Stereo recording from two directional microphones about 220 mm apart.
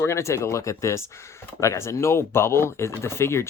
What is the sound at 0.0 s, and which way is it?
Speech, 15° left (ahead or behind).